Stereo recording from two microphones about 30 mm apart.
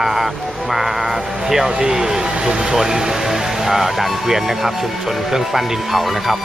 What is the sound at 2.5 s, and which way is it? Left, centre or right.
Speech, right.